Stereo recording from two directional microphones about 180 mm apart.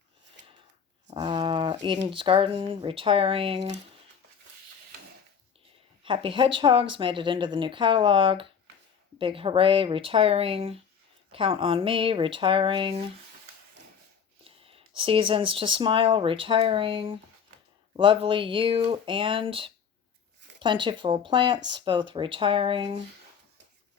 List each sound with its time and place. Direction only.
1.1 s a sound: 25° right (ahead or behind)
2.0 s speech: 30° right (ahead or behind)
6.0 s speech: 30° right (ahead or behind)
14.4 s speech: 30° right (ahead or behind)